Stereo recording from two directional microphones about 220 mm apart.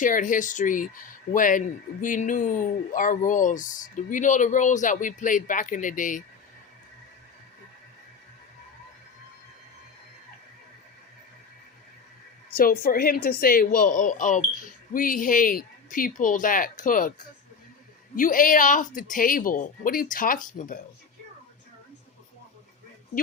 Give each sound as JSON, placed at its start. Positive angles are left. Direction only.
{"t": 0.0, "sound": "speech", "side_deg": 35}
{"t": 12.5, "sound": "speech", "side_deg": 40}
{"t": 18.2, "sound": "speech", "side_deg": 35}